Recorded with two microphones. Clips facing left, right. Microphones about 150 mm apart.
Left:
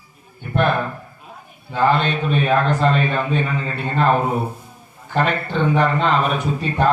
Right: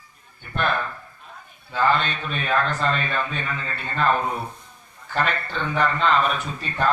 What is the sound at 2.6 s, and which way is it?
Speech, 35° left (ahead or behind).